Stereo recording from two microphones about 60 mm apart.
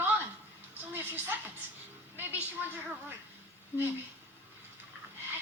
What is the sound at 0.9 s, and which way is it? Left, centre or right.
Music, right.